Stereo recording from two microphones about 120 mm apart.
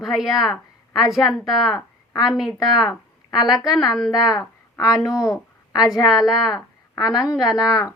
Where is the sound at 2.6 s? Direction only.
35° left (ahead or behind).